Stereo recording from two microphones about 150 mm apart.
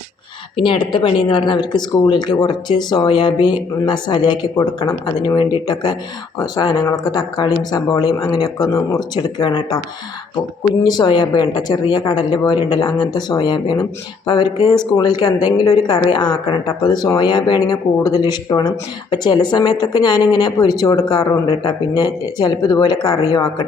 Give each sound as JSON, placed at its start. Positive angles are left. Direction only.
{"t": 0.5, "sound": "speech", "side_deg": 35}
{"t": 10.8, "sound": "speech", "side_deg": 30}
{"t": 21.5, "sound": "speech", "side_deg": 35}